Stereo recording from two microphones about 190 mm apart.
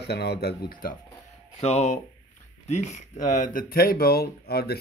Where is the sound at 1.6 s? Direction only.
35° left (ahead or behind).